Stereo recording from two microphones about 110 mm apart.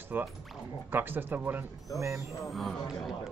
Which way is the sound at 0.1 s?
15° right (ahead or behind).